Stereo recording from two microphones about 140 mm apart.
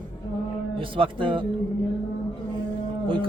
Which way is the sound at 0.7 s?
40° right (ahead or behind).